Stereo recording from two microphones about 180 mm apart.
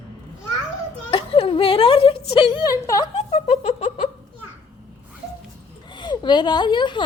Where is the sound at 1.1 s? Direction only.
30° left (ahead or behind).